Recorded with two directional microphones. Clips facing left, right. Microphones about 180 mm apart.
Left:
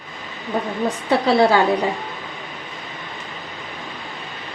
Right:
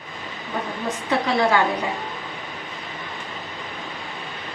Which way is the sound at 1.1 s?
35° left (ahead or behind).